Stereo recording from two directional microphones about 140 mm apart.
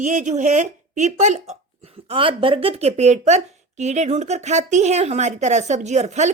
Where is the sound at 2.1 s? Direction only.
40° right (ahead or behind).